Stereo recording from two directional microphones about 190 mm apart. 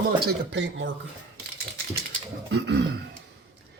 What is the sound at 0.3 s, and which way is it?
Speech, 70° right (ahead or behind).